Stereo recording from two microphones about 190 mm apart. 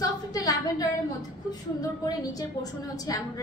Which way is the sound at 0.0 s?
20° left (ahead or behind).